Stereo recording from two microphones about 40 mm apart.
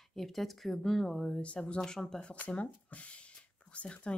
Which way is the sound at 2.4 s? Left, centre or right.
Left.